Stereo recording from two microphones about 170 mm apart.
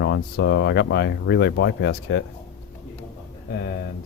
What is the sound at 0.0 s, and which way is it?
Speech, 90° left.